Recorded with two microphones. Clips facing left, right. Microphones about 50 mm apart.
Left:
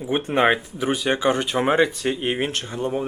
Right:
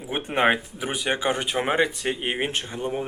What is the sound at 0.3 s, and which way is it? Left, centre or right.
Speech, centre.